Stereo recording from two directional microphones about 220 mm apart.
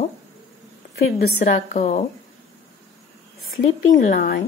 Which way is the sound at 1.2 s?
35° left (ahead or behind).